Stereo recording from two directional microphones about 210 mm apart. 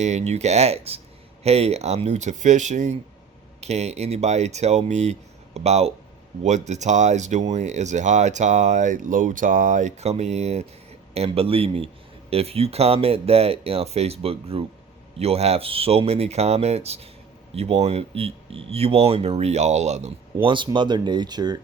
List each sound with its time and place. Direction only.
0.0 s speech: 35° right (ahead or behind)